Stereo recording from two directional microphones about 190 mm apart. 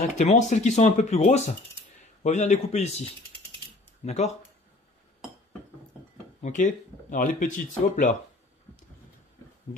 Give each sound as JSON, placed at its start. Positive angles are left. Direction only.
{"t": 0.2, "sound": "speech", "side_deg": 40}
{"t": 6.4, "sound": "speech", "side_deg": 40}